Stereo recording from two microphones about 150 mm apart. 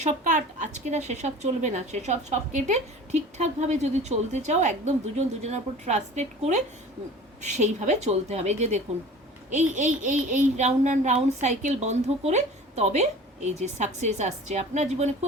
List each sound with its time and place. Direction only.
0.0 s a child's voice: 50° right (ahead or behind)